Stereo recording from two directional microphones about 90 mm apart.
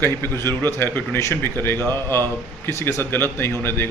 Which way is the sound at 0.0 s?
25° left (ahead or behind).